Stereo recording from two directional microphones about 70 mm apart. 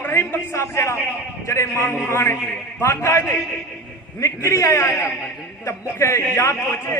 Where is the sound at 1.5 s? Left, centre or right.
Left.